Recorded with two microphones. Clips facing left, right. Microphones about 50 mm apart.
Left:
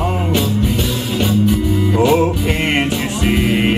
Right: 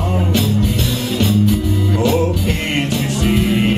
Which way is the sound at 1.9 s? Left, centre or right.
Left.